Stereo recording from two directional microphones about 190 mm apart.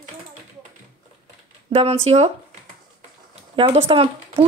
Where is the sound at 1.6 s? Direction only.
30° right (ahead or behind).